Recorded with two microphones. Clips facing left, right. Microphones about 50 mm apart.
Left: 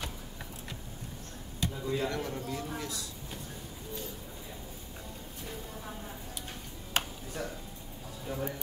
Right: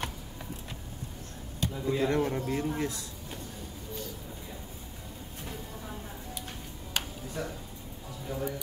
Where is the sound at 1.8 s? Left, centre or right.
Right.